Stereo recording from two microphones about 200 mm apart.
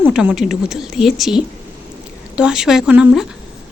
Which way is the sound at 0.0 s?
5° right (ahead or behind).